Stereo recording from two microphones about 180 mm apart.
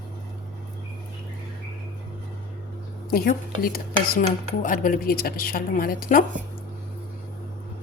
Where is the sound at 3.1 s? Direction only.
55° left (ahead or behind).